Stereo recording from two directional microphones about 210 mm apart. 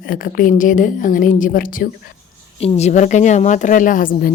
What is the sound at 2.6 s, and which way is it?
Speech, 30° left (ahead or behind).